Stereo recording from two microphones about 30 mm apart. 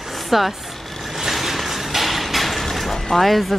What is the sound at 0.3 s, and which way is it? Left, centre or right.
Speech, centre.